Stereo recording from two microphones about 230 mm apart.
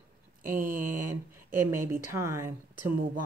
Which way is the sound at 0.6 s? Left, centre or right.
Right.